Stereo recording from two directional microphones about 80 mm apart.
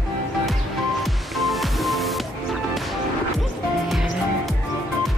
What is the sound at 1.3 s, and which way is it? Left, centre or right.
Music, centre.